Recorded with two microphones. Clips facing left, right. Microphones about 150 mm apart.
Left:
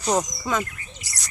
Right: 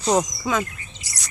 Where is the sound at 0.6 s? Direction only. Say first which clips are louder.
Right 1 dB; 25° right (ahead or behind).